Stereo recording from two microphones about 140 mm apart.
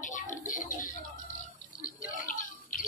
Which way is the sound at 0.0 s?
65° left (ahead or behind).